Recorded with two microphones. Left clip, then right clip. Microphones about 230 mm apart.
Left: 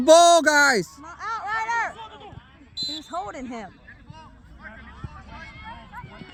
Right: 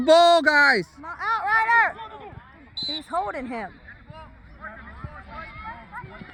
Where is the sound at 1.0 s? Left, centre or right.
Right.